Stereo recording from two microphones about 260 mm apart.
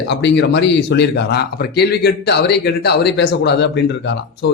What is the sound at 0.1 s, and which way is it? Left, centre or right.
A man's voice, left.